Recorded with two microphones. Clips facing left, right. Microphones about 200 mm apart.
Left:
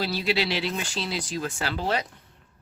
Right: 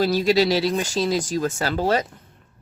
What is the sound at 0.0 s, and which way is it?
Speech, 45° right (ahead or behind).